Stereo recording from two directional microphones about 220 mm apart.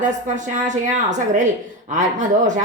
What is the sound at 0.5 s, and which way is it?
Speech, 35° right (ahead or behind).